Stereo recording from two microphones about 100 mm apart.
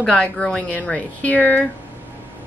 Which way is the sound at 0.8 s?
15° left (ahead or behind).